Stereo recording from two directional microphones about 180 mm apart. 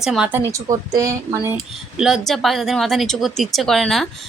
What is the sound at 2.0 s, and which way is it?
Speech, centre (ahead or behind).